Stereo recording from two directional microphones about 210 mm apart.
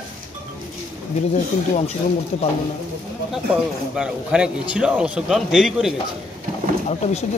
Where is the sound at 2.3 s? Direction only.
30° left (ahead or behind).